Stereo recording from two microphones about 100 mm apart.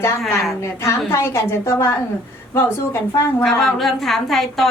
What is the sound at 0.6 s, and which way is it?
A woman's voice, 25° left (ahead or behind).